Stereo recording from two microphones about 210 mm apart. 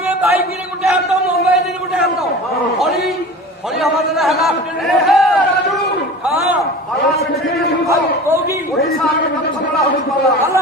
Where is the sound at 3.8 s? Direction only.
Centre (ahead or behind).